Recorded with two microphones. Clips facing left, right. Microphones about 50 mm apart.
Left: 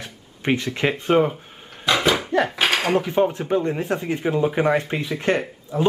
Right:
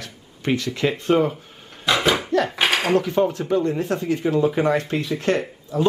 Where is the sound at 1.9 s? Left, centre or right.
Centre.